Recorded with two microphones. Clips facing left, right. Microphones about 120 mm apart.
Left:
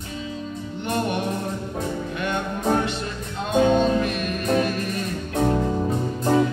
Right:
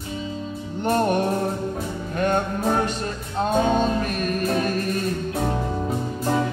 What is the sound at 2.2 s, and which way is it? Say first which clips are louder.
Music: right 5 dB; 40° right (ahead or behind).